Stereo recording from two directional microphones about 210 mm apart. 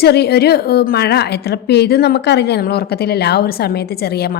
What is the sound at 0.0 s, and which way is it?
A woman's voice, 50° left (ahead or behind).